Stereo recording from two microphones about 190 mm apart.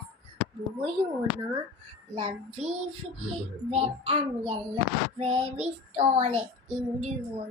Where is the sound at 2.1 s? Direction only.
35° right (ahead or behind).